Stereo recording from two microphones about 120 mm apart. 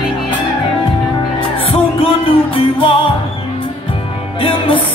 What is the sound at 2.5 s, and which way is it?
Music, 45° left (ahead or behind).